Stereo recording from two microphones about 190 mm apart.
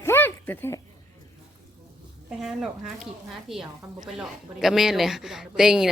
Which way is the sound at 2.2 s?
Centre (ahead or behind).